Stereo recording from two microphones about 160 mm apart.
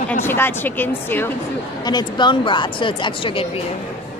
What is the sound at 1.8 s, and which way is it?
Speech, 25° left (ahead or behind).